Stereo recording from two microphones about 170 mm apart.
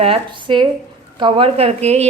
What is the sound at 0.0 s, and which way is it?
A woman's voice, 30° right (ahead or behind).